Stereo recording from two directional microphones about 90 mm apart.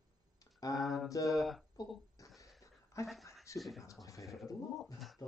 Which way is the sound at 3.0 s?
35° left (ahead or behind).